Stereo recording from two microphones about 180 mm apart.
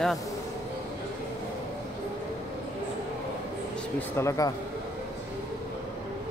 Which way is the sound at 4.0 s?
15° left (ahead or behind).